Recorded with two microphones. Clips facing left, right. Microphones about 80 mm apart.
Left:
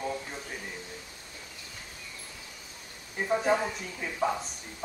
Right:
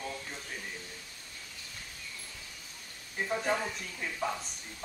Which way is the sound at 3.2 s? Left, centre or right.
Centre.